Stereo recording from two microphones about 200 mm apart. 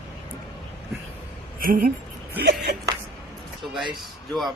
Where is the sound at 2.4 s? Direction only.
50° right (ahead or behind).